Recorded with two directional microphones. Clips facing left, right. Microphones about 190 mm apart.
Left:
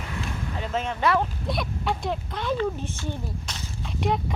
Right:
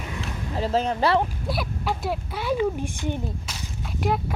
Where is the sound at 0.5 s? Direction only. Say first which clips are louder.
Right 7 dB; 35° right (ahead or behind).